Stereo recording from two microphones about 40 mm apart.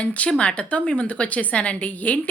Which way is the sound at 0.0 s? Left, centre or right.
Left.